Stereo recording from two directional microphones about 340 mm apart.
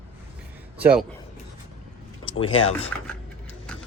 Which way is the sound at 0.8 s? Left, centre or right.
Centre.